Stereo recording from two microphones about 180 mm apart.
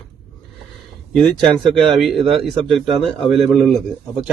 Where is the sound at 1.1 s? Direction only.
5° left (ahead or behind).